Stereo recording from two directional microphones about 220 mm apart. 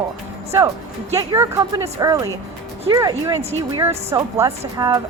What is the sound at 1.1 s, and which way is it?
Speech, 15° right (ahead or behind).